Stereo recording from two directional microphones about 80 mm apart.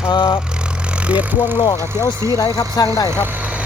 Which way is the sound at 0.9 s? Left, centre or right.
Centre.